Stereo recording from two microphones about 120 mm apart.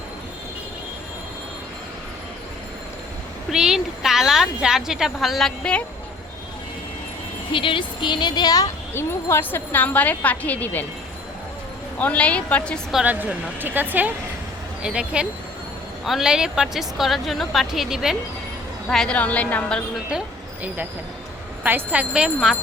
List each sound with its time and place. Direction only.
3.5 s a woman's voice: 5° right (ahead or behind)
7.5 s speech: 45° left (ahead or behind)
9.0 s speech: 20° left (ahead or behind)
11.9 s speech: 10° left (ahead or behind)
12.9 s a woman's voice: 5° right (ahead or behind)
18.9 s speech: 5° left (ahead or behind)
21.6 s speech: 15° right (ahead or behind)